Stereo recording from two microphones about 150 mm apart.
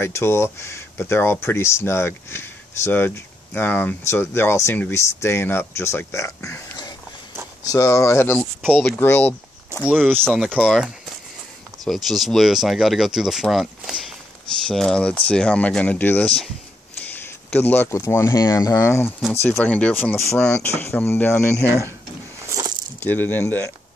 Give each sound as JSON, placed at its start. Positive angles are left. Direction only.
{"t": 0.0, "sound": "speech", "side_deg": 15}
{"t": 9.8, "sound": "speech", "side_deg": -10}
{"t": 22.9, "sound": "speech", "side_deg": 10}